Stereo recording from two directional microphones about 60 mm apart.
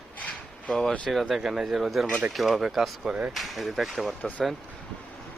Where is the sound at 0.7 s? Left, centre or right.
Centre.